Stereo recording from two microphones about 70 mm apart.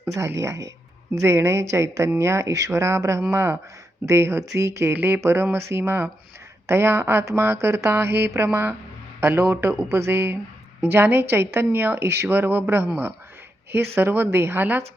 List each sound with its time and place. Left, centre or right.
0.3 s a woman's voice: right